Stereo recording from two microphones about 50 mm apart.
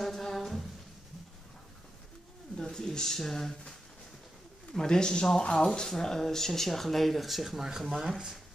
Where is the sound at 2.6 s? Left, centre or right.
Centre.